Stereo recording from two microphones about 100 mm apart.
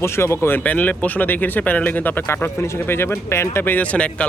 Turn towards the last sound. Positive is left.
turn(degrees=15)  # may be behind; listen again after turning